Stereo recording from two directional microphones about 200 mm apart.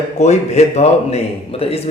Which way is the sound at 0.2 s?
35° left (ahead or behind).